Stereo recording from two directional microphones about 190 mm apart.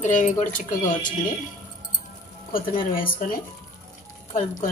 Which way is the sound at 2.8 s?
45° left (ahead or behind).